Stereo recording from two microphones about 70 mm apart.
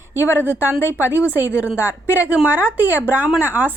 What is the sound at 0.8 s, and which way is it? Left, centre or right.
Speech, left.